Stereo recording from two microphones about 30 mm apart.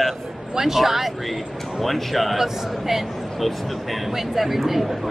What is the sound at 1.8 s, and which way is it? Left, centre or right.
Speech, centre.